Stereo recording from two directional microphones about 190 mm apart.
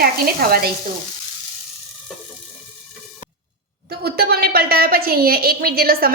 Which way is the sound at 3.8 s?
55° right (ahead or behind).